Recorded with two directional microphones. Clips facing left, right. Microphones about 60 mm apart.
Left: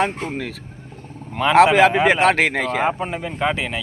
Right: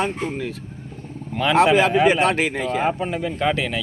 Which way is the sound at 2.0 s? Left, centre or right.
Left.